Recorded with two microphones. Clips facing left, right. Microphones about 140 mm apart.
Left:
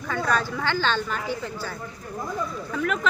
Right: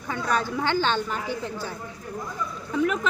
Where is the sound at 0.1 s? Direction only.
15° right (ahead or behind).